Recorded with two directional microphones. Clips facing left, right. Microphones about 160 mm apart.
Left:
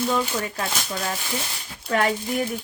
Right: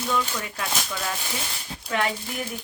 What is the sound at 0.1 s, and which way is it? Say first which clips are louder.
Speech: left 3 dB; 35° left (ahead or behind).